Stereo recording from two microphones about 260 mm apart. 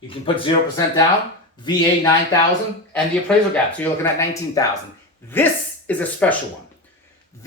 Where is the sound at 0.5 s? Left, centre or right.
Centre.